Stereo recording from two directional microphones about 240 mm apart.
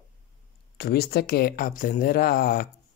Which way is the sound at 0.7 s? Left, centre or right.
Left.